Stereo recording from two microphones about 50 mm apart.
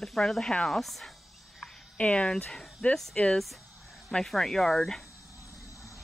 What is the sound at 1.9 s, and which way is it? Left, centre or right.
Speech, left.